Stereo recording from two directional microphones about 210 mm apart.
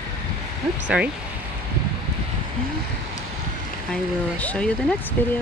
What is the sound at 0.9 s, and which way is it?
Speech, 5° right (ahead or behind).